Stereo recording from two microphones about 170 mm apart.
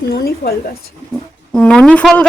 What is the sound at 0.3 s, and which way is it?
Speech, 65° left (ahead or behind).